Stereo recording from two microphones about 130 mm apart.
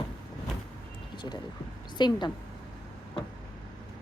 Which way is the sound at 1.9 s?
35° left (ahead or behind).